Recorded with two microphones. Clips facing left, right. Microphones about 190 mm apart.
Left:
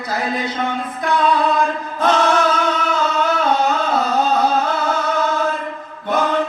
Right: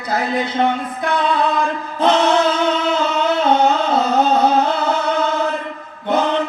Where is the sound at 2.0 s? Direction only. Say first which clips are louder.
Right 2 dB; 20° right (ahead or behind).